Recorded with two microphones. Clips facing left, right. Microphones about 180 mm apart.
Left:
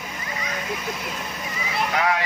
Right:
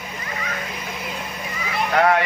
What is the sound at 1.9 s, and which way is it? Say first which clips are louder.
Speech: right 7 dB; 50° right (ahead or behind).